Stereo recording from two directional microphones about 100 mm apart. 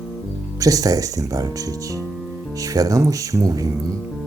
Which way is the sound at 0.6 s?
35° right (ahead or behind).